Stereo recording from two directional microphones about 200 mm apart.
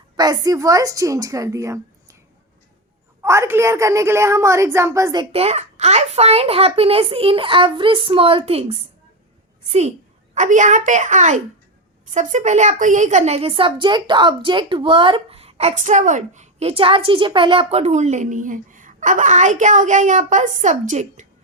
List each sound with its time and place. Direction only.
0.2 s a woman's voice: 20° right (ahead or behind)
3.2 s a woman's voice: 10° right (ahead or behind)
5.3 s a woman's voice: 30° right (ahead or behind)